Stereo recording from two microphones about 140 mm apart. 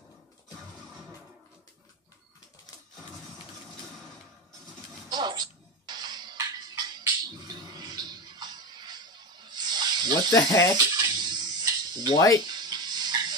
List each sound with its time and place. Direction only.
5.1 s music: 30° right (ahead or behind)
10.3 s speech: 25° left (ahead or behind)
11.0 s a sound: 30° right (ahead or behind)
12.4 s music: 30° right (ahead or behind)